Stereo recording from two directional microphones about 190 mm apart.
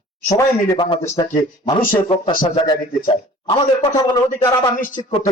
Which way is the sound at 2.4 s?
25° left (ahead or behind).